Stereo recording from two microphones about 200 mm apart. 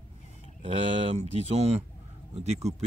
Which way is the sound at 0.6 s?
30° right (ahead or behind).